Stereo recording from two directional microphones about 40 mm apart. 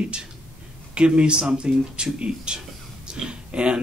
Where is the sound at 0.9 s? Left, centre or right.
Right.